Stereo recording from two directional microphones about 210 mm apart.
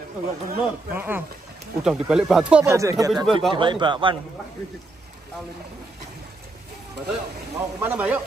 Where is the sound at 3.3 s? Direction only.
Centre (ahead or behind).